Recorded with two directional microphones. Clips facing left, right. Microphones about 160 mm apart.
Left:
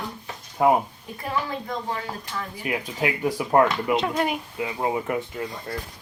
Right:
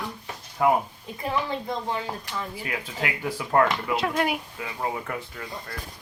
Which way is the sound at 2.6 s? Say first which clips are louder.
Left 9 dB; 15° left (ahead or behind).